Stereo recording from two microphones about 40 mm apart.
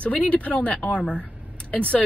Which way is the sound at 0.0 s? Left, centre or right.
Left.